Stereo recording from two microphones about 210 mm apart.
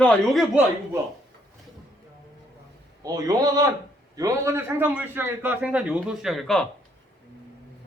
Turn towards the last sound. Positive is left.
turn(degrees=0)  # may be behind; listen again after turning